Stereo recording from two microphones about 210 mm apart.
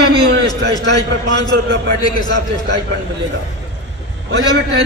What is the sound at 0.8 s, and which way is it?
Speech, 55° right (ahead or behind).